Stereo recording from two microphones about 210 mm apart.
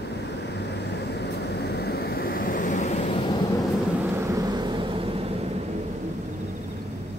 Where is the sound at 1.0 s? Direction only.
55° left (ahead or behind); by 2.9 s 35° left (ahead or behind).